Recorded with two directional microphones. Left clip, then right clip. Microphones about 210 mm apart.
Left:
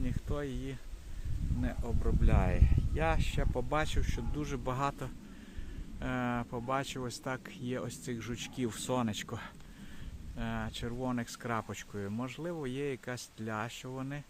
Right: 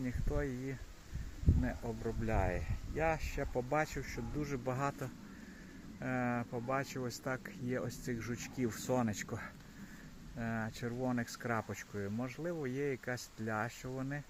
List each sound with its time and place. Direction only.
0.0 s speech: 5° left (ahead or behind)